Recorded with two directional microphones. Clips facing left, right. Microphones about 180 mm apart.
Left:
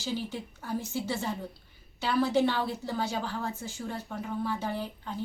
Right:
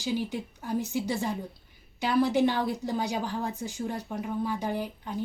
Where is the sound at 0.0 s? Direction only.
15° right (ahead or behind).